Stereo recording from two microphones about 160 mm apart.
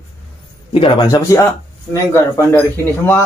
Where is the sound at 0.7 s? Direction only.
30° left (ahead or behind).